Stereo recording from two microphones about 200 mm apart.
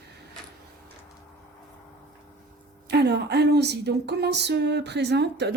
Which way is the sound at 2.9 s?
55° right (ahead or behind).